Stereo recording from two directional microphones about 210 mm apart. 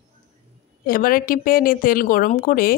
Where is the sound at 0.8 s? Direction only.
45° left (ahead or behind).